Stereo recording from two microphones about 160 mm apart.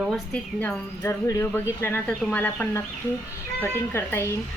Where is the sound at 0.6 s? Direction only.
15° left (ahead or behind).